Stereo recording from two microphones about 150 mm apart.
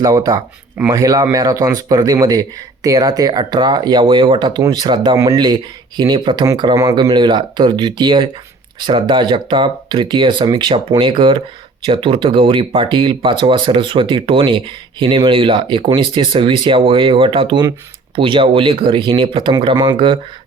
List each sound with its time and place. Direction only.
0.0 s speech: 25° right (ahead or behind)